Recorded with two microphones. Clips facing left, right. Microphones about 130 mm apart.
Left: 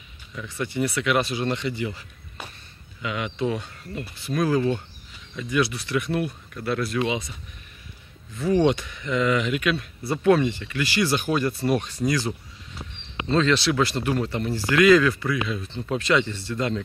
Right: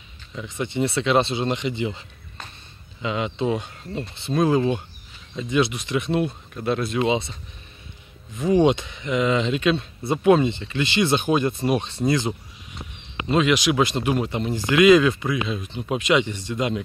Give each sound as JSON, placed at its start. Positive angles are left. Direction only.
{"t": 0.3, "sound": "speech", "side_deg": -20}
{"t": 8.4, "sound": "speech", "side_deg": -20}